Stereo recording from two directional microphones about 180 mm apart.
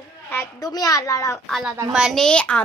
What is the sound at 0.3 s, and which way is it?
A child's voice, 15° left (ahead or behind).